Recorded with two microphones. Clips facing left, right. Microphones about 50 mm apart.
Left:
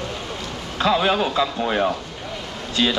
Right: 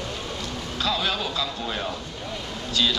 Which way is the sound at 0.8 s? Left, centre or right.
Left.